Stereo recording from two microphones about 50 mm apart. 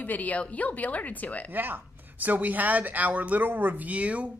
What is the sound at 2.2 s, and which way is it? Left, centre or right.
Speech, right.